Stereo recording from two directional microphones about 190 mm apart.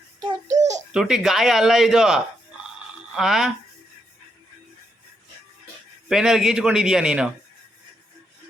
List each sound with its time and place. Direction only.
0.4 s a sound: 40° right (ahead or behind)
0.9 s speech: 5° right (ahead or behind)
6.1 s speech: centre (ahead or behind)